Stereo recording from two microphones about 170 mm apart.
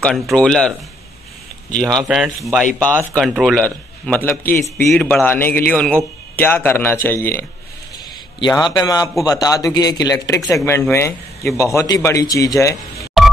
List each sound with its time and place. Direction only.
0.0 s speech: 5° left (ahead or behind)
2.0 s speech: centre (ahead or behind)
8.4 s speech: 25° left (ahead or behind)
13.2 s music: centre (ahead or behind)